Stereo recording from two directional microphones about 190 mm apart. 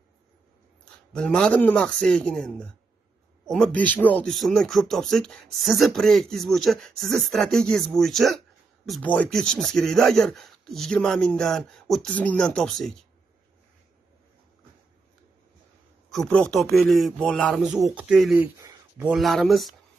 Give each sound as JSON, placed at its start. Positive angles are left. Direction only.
{"t": 1.1, "sound": "speech", "side_deg": 5}
{"t": 16.1, "sound": "speech", "side_deg": 5}
{"t": 18.6, "sound": "a sound", "side_deg": -15}
{"t": 19.0, "sound": "speech", "side_deg": 0}